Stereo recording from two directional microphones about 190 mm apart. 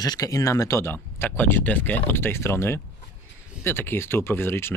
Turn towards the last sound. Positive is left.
turn(degrees=10)  # may be behind; listen again after turning